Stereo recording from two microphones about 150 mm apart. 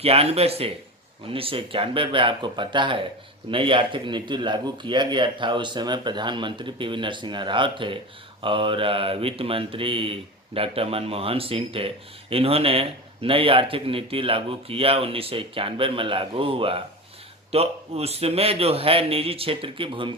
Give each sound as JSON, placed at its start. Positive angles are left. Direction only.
{"t": 0.0, "sound": "speech", "side_deg": -40}